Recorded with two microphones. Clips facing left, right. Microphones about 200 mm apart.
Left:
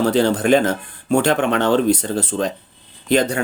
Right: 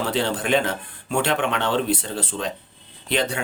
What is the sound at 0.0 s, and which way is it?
Speech, 40° left (ahead or behind).